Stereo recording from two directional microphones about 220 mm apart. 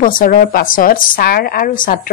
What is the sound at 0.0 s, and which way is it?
A woman's voice, 40° left (ahead or behind).